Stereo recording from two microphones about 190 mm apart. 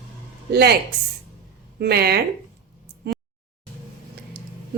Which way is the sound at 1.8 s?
55° right (ahead or behind).